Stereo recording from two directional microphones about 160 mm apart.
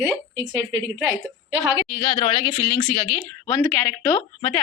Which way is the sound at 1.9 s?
25° left (ahead or behind).